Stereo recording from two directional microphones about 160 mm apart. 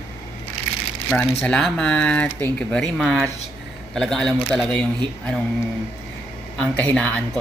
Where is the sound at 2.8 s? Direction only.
Centre (ahead or behind).